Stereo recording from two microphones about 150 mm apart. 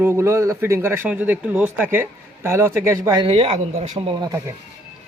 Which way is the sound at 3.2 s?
40° right (ahead or behind).